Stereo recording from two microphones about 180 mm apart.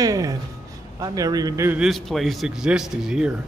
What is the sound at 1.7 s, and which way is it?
A man's voice, centre (ahead or behind).